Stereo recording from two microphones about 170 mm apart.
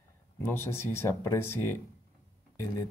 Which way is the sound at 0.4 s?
15° left (ahead or behind).